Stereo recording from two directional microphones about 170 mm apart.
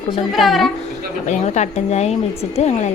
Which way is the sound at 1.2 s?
45° left (ahead or behind).